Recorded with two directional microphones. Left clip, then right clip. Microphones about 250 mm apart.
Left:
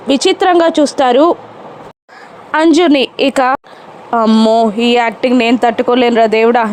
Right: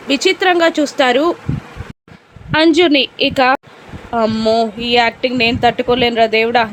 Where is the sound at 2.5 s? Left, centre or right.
Left.